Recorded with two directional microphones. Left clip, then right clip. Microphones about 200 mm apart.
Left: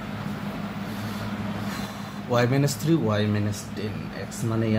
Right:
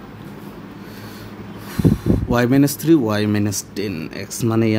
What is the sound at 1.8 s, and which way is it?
Speech, 50° right (ahead or behind).